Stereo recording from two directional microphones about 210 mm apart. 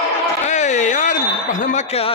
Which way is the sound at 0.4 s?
35° left (ahead or behind).